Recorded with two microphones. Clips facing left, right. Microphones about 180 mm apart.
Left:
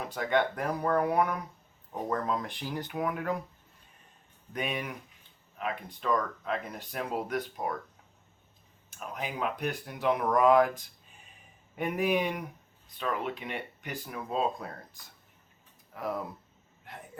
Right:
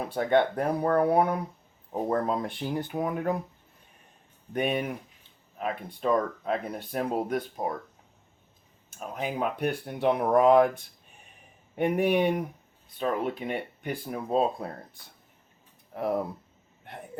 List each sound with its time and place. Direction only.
0.3 s speech: 30° right (ahead or behind)
4.5 s speech: 55° right (ahead or behind)
5.5 s speech: 35° right (ahead or behind)
9.0 s speech: 35° right (ahead or behind)
11.8 s speech: 30° right (ahead or behind)
15.9 s speech: 30° right (ahead or behind)